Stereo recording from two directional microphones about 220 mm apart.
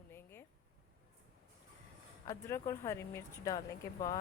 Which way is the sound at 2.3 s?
15° left (ahead or behind).